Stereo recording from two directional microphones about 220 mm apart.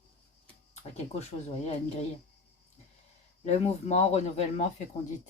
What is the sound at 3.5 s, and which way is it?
Speech, 30° left (ahead or behind).